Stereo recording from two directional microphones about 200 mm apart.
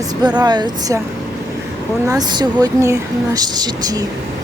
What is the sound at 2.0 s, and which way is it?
Speech, 20° right (ahead or behind).